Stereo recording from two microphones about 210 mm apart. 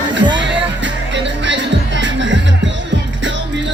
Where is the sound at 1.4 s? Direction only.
60° right (ahead or behind).